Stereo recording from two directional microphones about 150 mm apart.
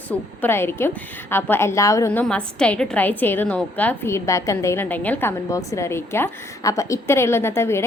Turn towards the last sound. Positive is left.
turn(degrees=15)  # may be behind; listen again after turning